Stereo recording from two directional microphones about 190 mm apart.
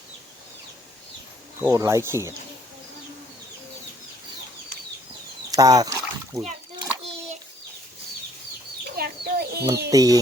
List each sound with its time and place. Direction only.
1.6 s speech: 15° right (ahead or behind)
5.5 s a sound: 20° right (ahead or behind)
9.0 s chicken: 55° right (ahead or behind)
9.9 s speech: 20° right (ahead or behind)